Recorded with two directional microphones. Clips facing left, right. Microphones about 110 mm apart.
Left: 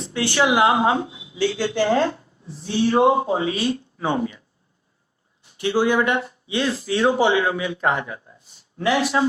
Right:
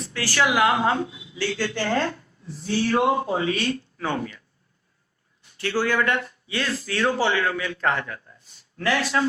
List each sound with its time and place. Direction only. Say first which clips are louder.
0.0 s speech: left 3 dB; 20° left (ahead or behind)
5.5 s speech: left 4 dB; 15° left (ahead or behind)